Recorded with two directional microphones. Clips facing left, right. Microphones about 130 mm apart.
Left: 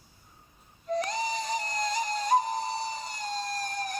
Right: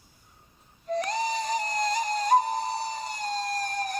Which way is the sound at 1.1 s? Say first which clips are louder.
Right 3 dB; 50° right (ahead or behind).